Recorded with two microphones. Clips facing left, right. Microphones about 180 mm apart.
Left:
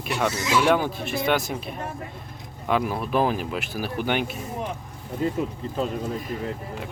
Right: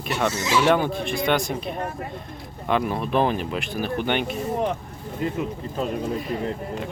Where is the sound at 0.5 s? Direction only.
Centre (ahead or behind).